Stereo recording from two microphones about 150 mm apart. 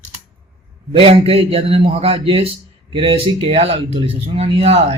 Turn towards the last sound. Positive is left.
turn(degrees=-45)  # may be behind; listen again after turning